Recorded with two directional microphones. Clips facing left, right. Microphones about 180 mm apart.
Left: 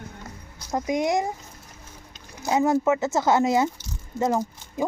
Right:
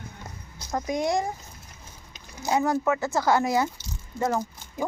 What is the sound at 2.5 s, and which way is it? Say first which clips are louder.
Speech: left 3 dB; 20° left (ahead or behind).